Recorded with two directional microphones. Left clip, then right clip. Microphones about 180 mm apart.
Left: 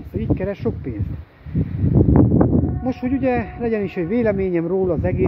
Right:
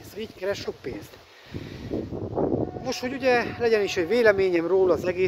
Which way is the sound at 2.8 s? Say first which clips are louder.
Left 4 dB; 20° right (ahead or behind).